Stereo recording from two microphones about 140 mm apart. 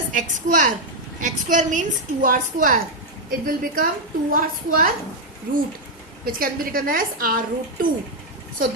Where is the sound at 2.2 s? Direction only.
85° right.